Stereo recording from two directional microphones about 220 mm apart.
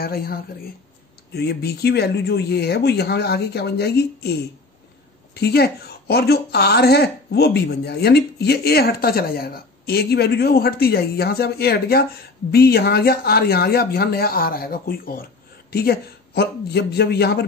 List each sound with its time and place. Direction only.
0.0 s a woman's voice: 45° left (ahead or behind)